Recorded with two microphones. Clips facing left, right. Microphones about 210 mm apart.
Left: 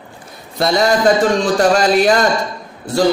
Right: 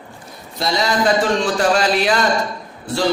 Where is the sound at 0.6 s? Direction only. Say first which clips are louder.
Left 5 dB; 50° left (ahead or behind).